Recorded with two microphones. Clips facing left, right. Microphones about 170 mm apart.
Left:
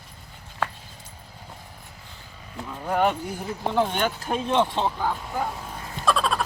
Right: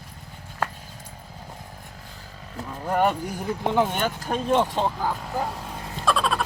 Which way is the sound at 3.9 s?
Centre (ahead or behind).